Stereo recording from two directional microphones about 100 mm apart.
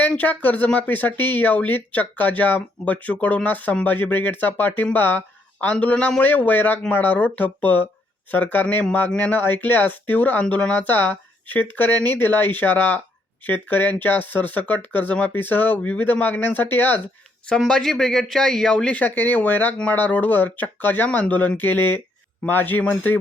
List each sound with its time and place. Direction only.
0.0 s speech: 15° left (ahead or behind)
17.6 s speech: 5° left (ahead or behind)